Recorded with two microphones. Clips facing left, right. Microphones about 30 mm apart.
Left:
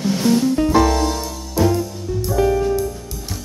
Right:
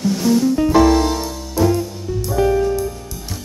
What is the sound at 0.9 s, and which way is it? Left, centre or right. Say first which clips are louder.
Music: right 3 dB; centre.